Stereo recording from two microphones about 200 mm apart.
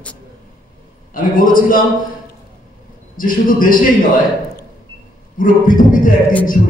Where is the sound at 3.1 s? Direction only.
45° left (ahead or behind).